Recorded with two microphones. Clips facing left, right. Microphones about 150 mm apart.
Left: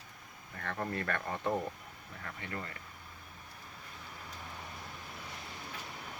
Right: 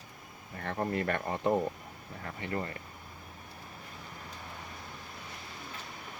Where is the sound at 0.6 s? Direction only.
25° right (ahead or behind).